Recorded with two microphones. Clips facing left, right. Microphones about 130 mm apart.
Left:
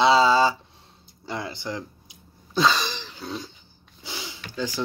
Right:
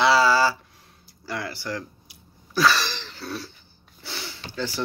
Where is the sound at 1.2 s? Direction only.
20° left (ahead or behind).